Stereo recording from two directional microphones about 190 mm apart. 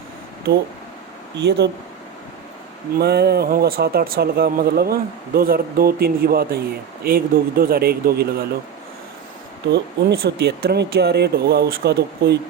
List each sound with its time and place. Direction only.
1.4 s speech: 65° right (ahead or behind)
3.0 s speech: 55° right (ahead or behind)
9.7 s speech: 60° right (ahead or behind)